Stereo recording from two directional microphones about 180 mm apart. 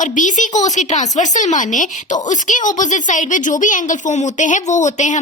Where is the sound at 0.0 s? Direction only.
45° left (ahead or behind).